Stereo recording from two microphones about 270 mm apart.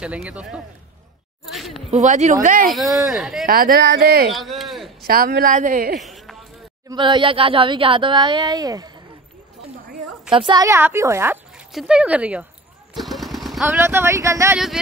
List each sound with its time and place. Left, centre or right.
0.0 s speech: centre
1.4 s a sound: centre
1.9 s a woman's voice: right
2.7 s speech: centre
3.4 s a woman's voice: right
4.3 s a sound: centre
5.0 s a woman's voice: right
5.9 s a sound: centre
6.9 s speech: centre
10.3 s speech: centre